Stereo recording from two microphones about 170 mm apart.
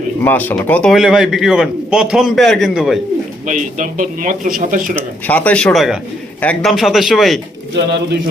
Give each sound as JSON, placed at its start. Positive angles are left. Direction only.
{"t": 0.3, "sound": "a man's voice", "side_deg": 10}
{"t": 3.4, "sound": "speech", "side_deg": -50}
{"t": 4.9, "sound": "a man's voice", "side_deg": 10}
{"t": 7.7, "sound": "speech", "side_deg": -80}